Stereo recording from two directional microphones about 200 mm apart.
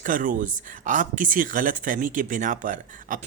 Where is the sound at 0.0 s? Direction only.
40° right (ahead or behind).